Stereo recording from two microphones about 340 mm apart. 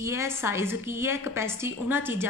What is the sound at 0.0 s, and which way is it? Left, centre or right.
A woman's voice, centre.